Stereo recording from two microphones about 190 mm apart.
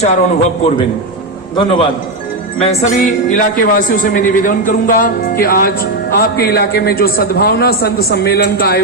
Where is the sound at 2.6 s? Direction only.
35° left (ahead or behind).